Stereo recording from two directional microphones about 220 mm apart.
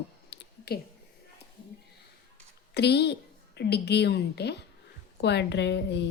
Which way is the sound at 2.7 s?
50° left (ahead or behind).